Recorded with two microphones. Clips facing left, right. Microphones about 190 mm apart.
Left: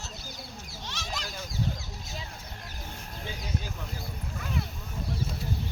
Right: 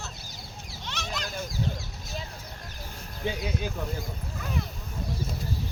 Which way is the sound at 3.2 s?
65° right (ahead or behind).